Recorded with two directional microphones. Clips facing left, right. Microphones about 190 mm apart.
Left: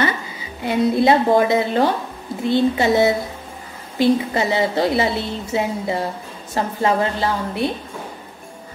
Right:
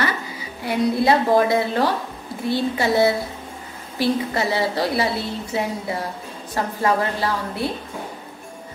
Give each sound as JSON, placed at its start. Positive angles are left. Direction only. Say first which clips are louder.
{"t": 0.7, "sound": "a woman's voice", "louder": "left 3 dB", "side_deg": 20}